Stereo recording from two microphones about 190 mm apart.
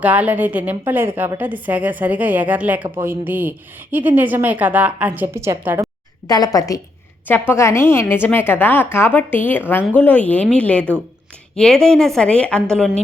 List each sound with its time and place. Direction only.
0.0 s a woman's voice: 10° right (ahead or behind)
6.2 s a woman's voice: 20° left (ahead or behind)